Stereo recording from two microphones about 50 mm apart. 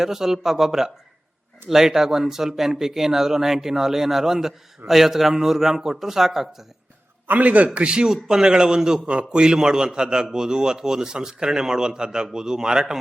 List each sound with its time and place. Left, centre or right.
0.0 s a man's voice: centre
7.3 s a man's voice: right; by 13.0 s centre